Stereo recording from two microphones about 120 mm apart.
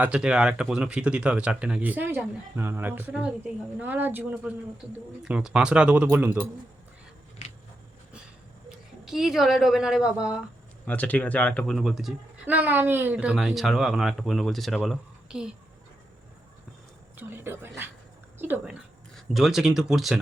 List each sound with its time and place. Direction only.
0.0 s speech: 10° right (ahead or behind)
7.4 s a sound: 80° left
8.7 s a woman's voice: 5° right (ahead or behind)
10.8 s speech: 15° left (ahead or behind); by 12.1 s centre (ahead or behind)
12.5 s speech: 15° right (ahead or behind)
17.2 s speech: 20° right (ahead or behind)
19.1 s speech: centre (ahead or behind)